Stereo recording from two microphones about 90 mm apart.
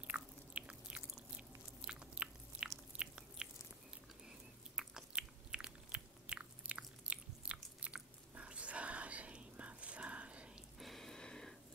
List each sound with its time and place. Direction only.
0.0 s biting: 10° right (ahead or behind)
4.7 s biting: 10° right (ahead or behind)
10.8 s a sound: 5° left (ahead or behind)